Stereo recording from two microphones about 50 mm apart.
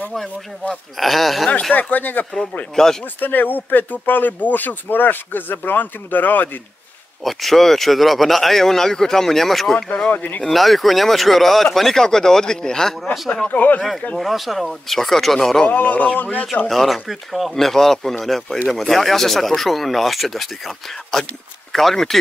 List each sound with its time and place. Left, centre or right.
0.9 s speech: centre
1.7 s speech: left
2.7 s speech: centre
3.2 s speech: left
7.2 s speech: centre
9.8 s speech: centre
10.4 s speech: centre
13.5 s speech: left
14.1 s speech: centre
15.7 s speech: left
16.6 s speech: centre